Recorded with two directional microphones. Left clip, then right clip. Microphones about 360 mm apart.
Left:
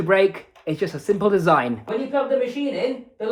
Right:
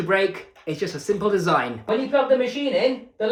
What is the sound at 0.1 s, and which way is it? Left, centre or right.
Speech, centre.